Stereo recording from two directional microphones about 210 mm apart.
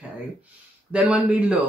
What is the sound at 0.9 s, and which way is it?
Speech, 5° right (ahead or behind).